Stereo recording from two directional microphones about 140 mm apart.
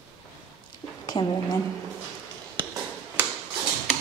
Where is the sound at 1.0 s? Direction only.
30° left (ahead or behind).